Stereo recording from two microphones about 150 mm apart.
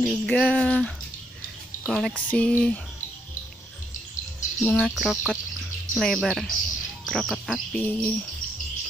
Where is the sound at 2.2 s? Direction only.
5° left (ahead or behind).